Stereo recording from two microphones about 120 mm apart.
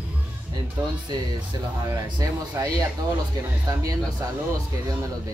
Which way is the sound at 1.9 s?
30° right (ahead or behind).